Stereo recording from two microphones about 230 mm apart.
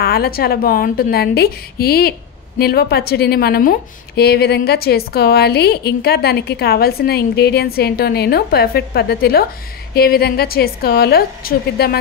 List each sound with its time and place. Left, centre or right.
0.0 s a woman's voice: left